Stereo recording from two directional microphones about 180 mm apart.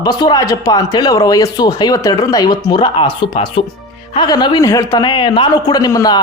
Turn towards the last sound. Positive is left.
turn(degrees=20)  # may be behind; listen again after turning